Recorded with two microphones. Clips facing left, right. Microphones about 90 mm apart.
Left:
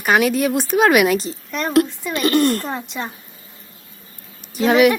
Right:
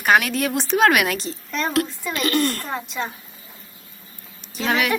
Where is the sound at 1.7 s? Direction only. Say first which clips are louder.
Left 6 dB; 20° left (ahead or behind).